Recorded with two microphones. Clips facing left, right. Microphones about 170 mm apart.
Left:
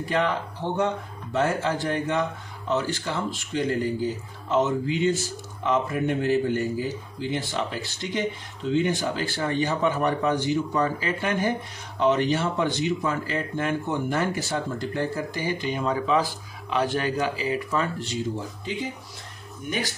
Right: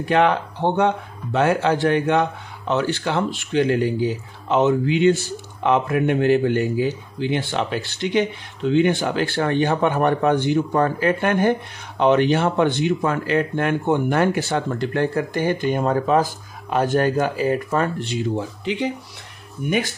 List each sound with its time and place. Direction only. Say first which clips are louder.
0.0 s speech: right 7 dB; 70° right (ahead or behind)